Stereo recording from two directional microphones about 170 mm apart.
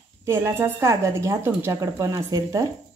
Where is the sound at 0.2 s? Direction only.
15° right (ahead or behind).